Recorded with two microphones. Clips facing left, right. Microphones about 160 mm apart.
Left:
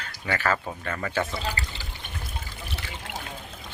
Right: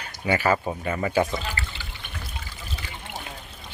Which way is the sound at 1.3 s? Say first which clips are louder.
Right 1 dB; 35° left (ahead or behind).